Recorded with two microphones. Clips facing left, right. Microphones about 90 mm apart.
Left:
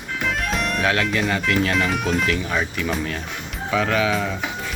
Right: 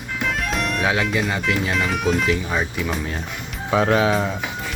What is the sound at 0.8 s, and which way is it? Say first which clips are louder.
Speech: left 1 dB; 15° right (ahead or behind).